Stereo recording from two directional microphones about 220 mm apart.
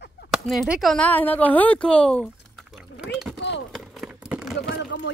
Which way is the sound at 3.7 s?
5° right (ahead or behind).